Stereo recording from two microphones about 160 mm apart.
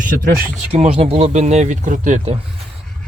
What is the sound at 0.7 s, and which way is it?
Speech, 40° right (ahead or behind).